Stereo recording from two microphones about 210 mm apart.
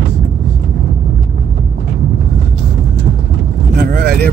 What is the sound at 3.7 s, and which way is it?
Vehicle, 45° right (ahead or behind).